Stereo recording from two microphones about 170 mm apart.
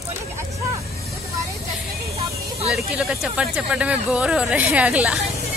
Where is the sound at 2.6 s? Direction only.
5° right (ahead or behind).